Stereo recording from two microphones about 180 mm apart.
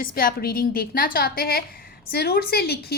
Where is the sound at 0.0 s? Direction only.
55° left (ahead or behind).